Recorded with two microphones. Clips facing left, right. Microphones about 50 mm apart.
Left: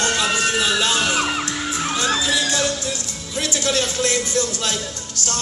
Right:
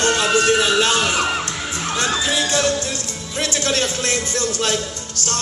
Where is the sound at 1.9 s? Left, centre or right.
Right.